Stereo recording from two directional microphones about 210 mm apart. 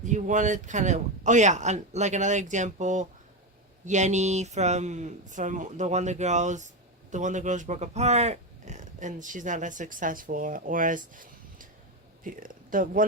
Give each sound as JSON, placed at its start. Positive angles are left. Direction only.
{"t": 0.0, "sound": "speech", "side_deg": -35}